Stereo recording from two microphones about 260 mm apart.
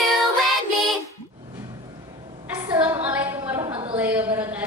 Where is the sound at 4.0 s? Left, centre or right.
Centre.